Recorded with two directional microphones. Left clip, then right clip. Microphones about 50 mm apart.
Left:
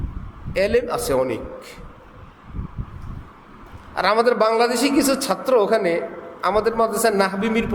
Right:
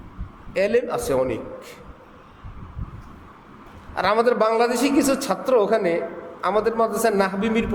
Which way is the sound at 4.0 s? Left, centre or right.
Centre.